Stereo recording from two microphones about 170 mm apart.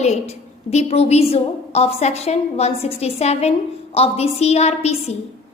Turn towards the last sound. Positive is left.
turn(degrees=40)  # may be behind; listen again after turning